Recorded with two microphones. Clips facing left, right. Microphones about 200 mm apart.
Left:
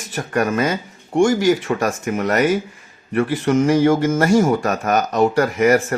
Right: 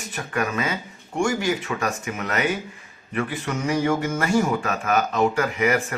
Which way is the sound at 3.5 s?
90° left.